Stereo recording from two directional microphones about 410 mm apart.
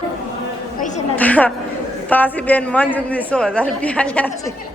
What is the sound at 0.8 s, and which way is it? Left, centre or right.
Speech, centre.